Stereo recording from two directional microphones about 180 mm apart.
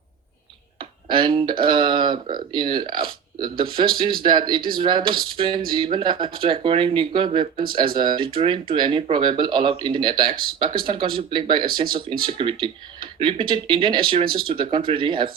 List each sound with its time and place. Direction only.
1.1 s speech: 25° right (ahead or behind)